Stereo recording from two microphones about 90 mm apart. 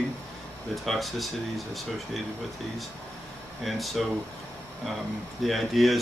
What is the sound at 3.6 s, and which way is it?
Speech, centre (ahead or behind).